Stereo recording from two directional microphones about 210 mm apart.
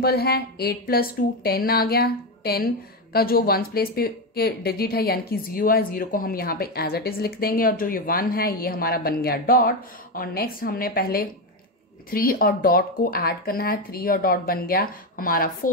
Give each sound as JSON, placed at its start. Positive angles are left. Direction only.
{"t": 0.0, "sound": "speech", "side_deg": 50}